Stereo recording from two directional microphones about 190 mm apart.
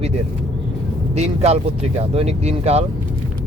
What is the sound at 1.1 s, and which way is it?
Speech, 35° right (ahead or behind).